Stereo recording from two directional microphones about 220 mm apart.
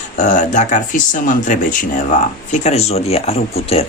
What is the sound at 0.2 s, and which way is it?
A man's voice, 35° left (ahead or behind).